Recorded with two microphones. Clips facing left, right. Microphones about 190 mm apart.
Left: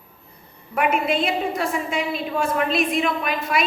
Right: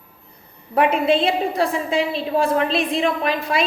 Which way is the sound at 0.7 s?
30° right (ahead or behind).